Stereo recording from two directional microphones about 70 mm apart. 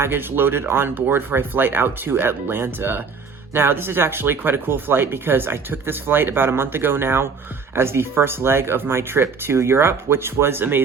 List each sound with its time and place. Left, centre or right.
0.0 s speech: right